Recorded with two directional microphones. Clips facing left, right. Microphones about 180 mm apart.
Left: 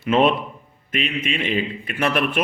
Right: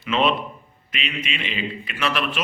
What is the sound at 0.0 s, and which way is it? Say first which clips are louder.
A man's voice: left 4 dB; 50° left (ahead or behind).